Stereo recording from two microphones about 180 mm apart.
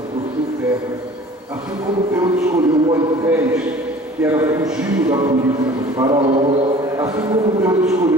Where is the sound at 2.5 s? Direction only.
20° right (ahead or behind).